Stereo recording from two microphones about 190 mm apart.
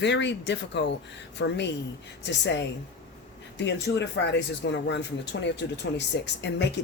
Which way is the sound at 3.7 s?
65° left (ahead or behind).